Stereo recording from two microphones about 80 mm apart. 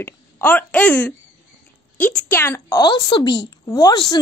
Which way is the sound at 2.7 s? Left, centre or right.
Left.